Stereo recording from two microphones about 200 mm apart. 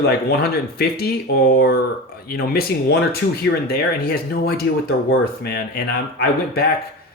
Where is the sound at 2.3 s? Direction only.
50° left (ahead or behind).